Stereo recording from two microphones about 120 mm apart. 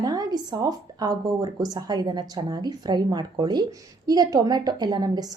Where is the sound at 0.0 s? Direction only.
35° right (ahead or behind).